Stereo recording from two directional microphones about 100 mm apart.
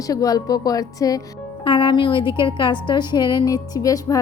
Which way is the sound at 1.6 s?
55° left (ahead or behind).